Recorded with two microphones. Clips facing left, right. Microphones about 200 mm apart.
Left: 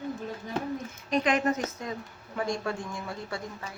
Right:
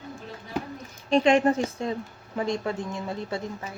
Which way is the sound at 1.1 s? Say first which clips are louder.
Right 6 dB; 30° right (ahead or behind).